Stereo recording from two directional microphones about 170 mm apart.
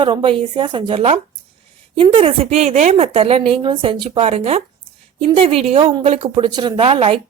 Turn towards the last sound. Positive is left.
turn(degrees=-35)  # may be behind; listen again after turning